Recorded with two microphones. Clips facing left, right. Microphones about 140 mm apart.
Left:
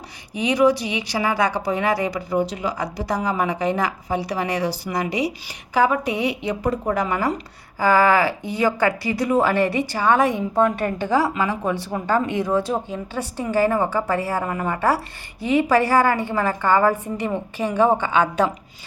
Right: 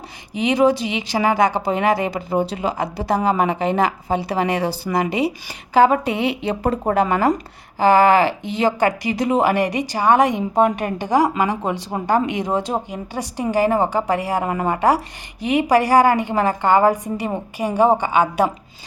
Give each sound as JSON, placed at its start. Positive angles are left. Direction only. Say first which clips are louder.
{"t": 0.3, "sound": "speech", "louder": "right 1 dB", "side_deg": -25}
{"t": 7.8, "sound": "a woman's voice", "louder": "right 3 dB", "side_deg": -20}